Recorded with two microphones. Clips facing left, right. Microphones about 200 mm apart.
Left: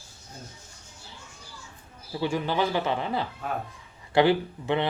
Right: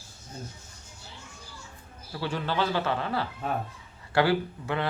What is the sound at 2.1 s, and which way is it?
Speech, 15° left (ahead or behind).